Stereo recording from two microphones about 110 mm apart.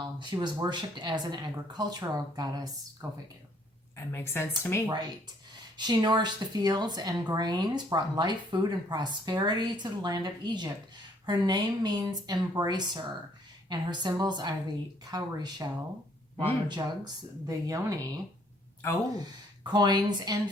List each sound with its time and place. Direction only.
0.0 s speech: 45° right (ahead or behind)
4.1 s speech: 20° left (ahead or behind)
4.9 s speech: 40° right (ahead or behind)
19.2 s speech: 40° right (ahead or behind)